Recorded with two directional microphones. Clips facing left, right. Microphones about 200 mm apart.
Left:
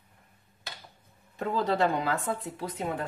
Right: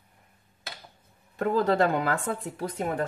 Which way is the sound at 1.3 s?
50° right (ahead or behind).